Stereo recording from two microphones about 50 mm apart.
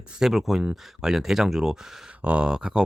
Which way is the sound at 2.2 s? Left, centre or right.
Right.